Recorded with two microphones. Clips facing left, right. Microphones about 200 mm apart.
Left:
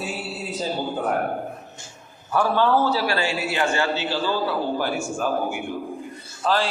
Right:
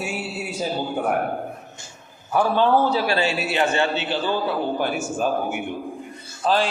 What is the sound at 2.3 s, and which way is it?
A man's voice, 15° right (ahead or behind).